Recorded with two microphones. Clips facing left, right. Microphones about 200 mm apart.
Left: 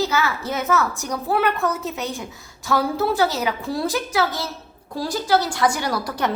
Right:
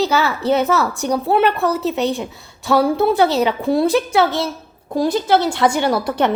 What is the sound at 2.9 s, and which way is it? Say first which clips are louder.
Speech: right 5 dB; 60° right (ahead or behind).